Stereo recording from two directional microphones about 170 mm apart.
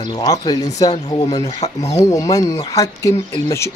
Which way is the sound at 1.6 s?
40° left (ahead or behind).